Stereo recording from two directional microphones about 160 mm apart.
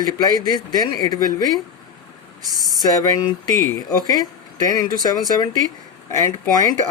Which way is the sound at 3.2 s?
25° left (ahead or behind).